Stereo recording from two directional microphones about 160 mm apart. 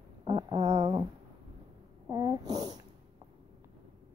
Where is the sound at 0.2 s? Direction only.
30° right (ahead or behind).